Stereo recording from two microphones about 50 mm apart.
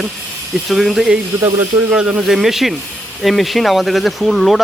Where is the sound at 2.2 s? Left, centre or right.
Centre.